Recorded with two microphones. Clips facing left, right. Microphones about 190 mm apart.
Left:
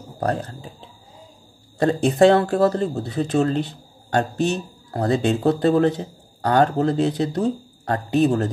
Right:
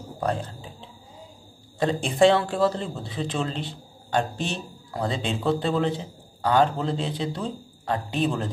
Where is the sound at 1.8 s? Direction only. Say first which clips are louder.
Left 4 dB; 40° left (ahead or behind).